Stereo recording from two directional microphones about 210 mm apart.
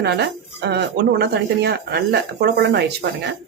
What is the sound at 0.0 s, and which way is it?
Speech, 50° right (ahead or behind).